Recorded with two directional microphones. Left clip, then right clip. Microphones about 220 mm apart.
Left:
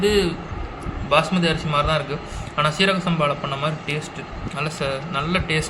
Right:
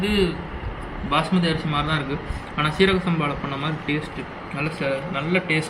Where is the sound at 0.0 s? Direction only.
50° left (ahead or behind).